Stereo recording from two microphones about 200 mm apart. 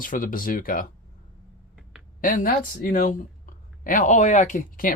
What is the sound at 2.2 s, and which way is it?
Speech, 45° left (ahead or behind).